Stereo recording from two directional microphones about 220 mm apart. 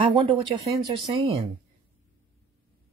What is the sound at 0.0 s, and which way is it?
Speech, 25° right (ahead or behind).